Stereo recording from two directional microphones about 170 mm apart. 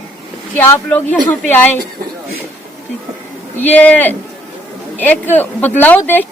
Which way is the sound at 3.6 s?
10° left (ahead or behind).